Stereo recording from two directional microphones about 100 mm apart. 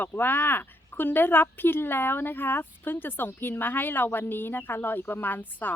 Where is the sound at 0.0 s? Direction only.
20° left (ahead or behind).